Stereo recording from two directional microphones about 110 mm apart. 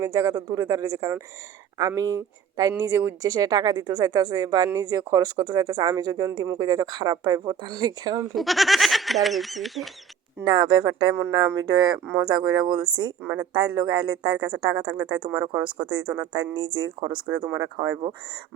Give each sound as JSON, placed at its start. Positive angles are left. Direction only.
{"t": 0.0, "sound": "speech", "side_deg": -35}
{"t": 8.4, "sound": "speech", "side_deg": 0}
{"t": 10.4, "sound": "speech", "side_deg": -45}
{"t": 11.1, "sound": "speech", "side_deg": -25}
{"t": 11.6, "sound": "speech", "side_deg": -40}
{"t": 13.2, "sound": "speech", "side_deg": -20}
{"t": 13.5, "sound": "speech", "side_deg": -40}